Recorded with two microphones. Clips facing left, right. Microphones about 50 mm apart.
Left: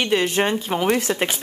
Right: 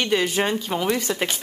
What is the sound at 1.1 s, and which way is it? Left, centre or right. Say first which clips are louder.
Speech: left 3 dB; left.